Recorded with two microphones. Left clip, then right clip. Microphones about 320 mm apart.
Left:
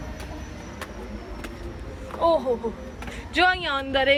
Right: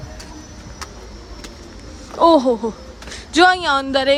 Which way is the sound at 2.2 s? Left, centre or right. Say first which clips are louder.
Right 9 dB; right.